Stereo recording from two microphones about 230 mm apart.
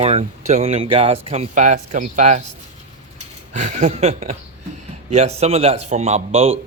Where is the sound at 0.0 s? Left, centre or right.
Right.